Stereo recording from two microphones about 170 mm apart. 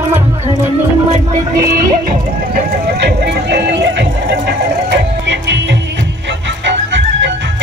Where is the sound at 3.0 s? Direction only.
80° right.